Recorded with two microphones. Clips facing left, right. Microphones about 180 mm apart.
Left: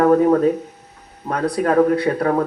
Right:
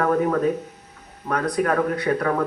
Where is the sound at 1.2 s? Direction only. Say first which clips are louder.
Left 3 dB; 30° left (ahead or behind).